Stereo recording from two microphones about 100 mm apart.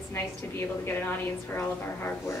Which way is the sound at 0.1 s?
20° left (ahead or behind).